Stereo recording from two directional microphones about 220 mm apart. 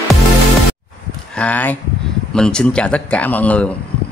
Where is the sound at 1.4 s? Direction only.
5° left (ahead or behind).